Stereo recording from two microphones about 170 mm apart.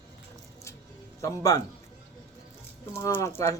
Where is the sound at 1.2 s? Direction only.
20° left (ahead or behind).